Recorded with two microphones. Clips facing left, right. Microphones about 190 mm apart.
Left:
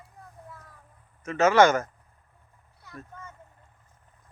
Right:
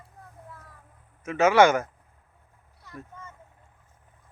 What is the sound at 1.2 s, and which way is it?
Speech, 10° right (ahead or behind).